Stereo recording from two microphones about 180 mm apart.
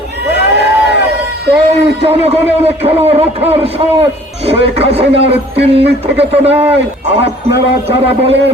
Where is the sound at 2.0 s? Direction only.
35° right (ahead or behind).